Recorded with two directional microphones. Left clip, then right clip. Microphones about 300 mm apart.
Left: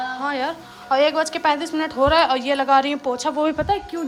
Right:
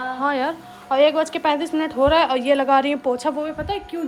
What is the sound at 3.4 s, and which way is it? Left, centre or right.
Speech, centre.